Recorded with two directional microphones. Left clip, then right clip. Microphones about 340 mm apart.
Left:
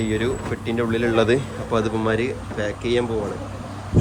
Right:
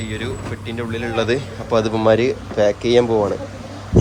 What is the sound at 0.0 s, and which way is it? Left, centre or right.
Speech, centre.